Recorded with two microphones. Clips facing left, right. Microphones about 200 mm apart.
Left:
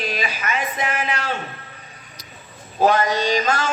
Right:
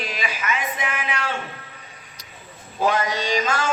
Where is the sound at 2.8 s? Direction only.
35° left (ahead or behind).